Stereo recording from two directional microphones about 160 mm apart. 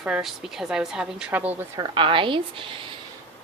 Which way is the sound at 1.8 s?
30° right (ahead or behind).